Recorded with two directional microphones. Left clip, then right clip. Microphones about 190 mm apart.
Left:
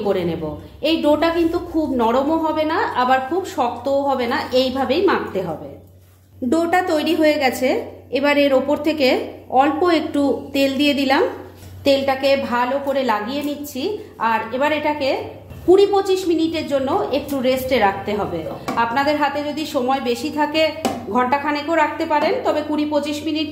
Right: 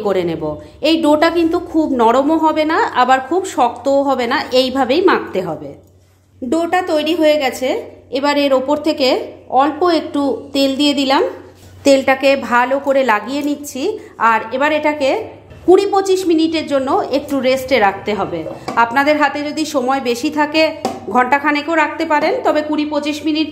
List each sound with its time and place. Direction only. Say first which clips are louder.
0.0 s a woman's voice: right 4 dB; 45° right (ahead or behind)
6.5 s a woman's voice: right 2 dB; 20° right (ahead or behind)
11.8 s a woman's voice: right 5 dB; 45° right (ahead or behind)